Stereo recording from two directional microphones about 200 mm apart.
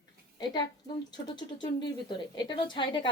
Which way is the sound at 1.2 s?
20° left (ahead or behind).